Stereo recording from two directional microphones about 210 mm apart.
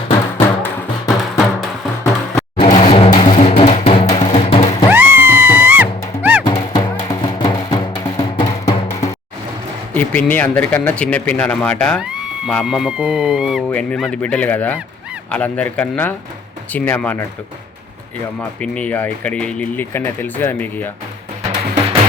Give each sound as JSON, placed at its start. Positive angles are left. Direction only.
{"t": 0.3, "sound": "music", "side_deg": 10}
{"t": 2.6, "sound": "music", "side_deg": 30}
{"t": 4.9, "sound": "music", "side_deg": -10}
{"t": 6.4, "sound": "music", "side_deg": 20}
{"t": 9.9, "sound": "speech", "side_deg": 5}
{"t": 18.3, "sound": "speech", "side_deg": 5}